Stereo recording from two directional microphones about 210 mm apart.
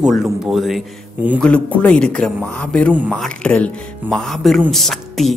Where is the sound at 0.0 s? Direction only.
Centre (ahead or behind).